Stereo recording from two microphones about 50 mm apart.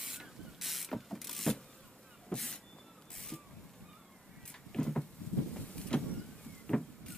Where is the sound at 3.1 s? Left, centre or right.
Centre.